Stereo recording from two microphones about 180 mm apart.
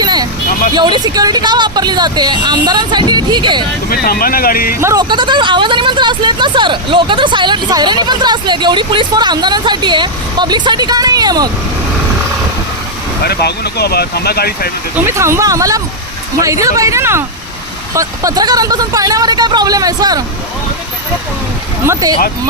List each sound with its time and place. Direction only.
0.0 s vehicle: 20° right (ahead or behind)
0.7 s speech: 25° right (ahead or behind)
3.8 s speech: 55° left (ahead or behind)
4.8 s speech: 20° right (ahead or behind)
13.2 s speech: 65° left (ahead or behind)
15.0 s speech: 15° right (ahead or behind)
22.0 s speech: 20° right (ahead or behind)